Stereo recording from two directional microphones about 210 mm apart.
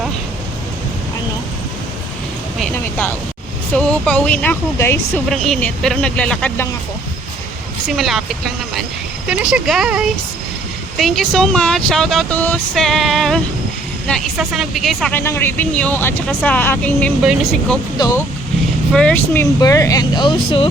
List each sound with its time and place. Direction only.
3.8 s speech: 5° left (ahead or behind)
7.9 s speech: centre (ahead or behind)
17.9 s speech: 20° left (ahead or behind)
18.9 s speech: 5° left (ahead or behind); by 20.7 s 25° left (ahead or behind)